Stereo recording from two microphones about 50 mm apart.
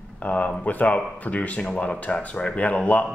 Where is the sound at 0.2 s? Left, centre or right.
Left.